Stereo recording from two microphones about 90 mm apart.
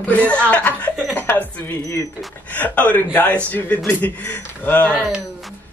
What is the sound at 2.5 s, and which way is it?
A man's voice, 15° left (ahead or behind).